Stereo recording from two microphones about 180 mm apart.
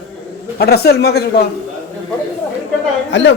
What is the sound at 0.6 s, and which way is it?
Speech, 60° left (ahead or behind).